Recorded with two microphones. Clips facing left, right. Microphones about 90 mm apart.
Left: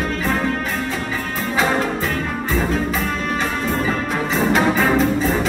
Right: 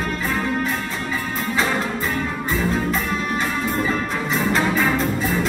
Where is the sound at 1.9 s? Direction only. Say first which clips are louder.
Left 1 dB; 5° right (ahead or behind).